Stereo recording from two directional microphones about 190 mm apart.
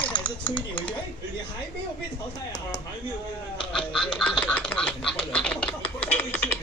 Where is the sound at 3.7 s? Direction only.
5° left (ahead or behind).